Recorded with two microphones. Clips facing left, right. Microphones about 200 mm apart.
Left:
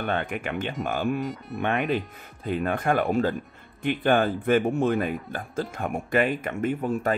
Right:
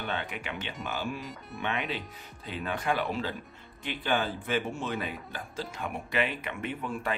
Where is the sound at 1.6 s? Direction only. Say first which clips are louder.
Left 8 dB; 50° left (ahead or behind).